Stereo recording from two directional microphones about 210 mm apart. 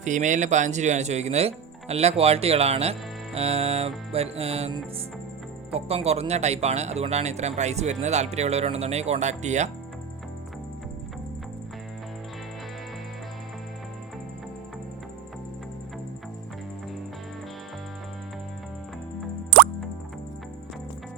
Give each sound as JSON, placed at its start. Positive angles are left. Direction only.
{"t": 0.0, "sound": "speech", "side_deg": -35}
{"t": 3.3, "sound": "music", "side_deg": -30}
{"t": 5.7, "sound": "speech", "side_deg": -30}